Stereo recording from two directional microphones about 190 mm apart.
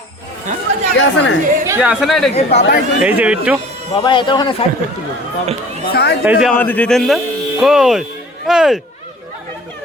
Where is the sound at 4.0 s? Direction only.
25° left (ahead or behind).